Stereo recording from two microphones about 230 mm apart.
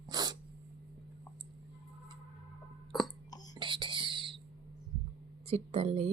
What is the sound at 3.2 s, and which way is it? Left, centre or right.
Whispering, centre.